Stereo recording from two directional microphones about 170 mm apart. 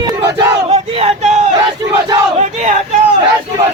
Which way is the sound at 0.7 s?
35° right (ahead or behind).